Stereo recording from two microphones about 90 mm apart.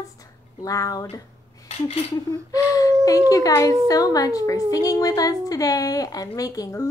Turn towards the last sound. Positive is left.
turn(degrees=40)  # may be behind; listen again after turning